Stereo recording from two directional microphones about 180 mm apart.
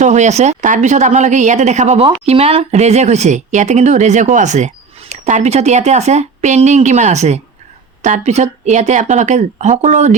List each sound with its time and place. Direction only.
0.0 s speech: 40° right (ahead or behind)